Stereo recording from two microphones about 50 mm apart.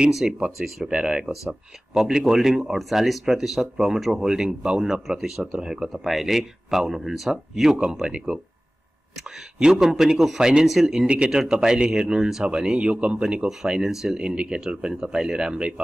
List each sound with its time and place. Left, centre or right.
0.1 s speech: centre
0.9 s speech: centre
1.3 s speech: centre
5.9 s speech: centre
9.6 s speech: centre
11.1 s speech: centre